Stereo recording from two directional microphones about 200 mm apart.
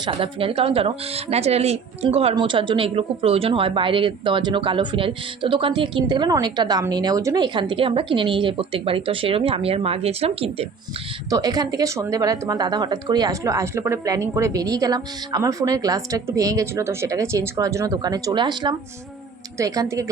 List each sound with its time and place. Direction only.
0.0 s speech: 25° right (ahead or behind)
11.3 s a woman's voice: 20° right (ahead or behind)